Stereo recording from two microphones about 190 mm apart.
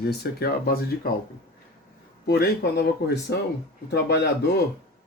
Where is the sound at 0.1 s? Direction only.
55° left (ahead or behind).